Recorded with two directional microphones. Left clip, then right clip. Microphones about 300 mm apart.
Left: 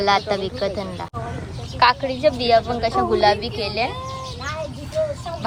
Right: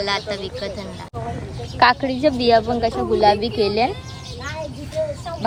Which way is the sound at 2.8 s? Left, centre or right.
Left.